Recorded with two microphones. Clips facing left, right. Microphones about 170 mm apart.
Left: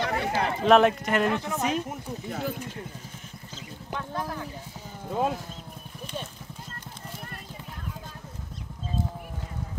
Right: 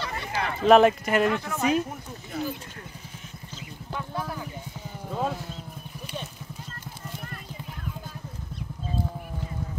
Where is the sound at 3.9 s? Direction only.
10° right (ahead or behind).